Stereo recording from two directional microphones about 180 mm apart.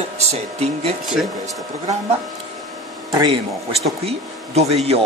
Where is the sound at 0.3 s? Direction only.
35° right (ahead or behind).